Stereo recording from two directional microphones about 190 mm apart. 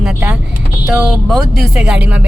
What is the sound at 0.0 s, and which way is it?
Vehicle, 5° right (ahead or behind).